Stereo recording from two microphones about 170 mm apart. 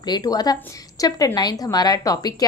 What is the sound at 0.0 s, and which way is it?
A woman's voice, 25° left (ahead or behind).